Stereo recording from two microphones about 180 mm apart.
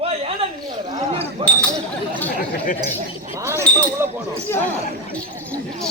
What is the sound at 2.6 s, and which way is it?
Speech, 45° left (ahead or behind).